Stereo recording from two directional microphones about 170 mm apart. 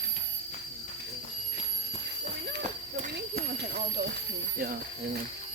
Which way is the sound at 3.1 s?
70° right (ahead or behind).